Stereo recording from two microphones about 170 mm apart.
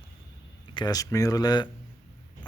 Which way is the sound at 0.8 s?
20° left (ahead or behind).